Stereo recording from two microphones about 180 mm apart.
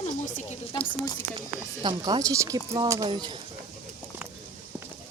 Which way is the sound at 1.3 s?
25° right (ahead or behind).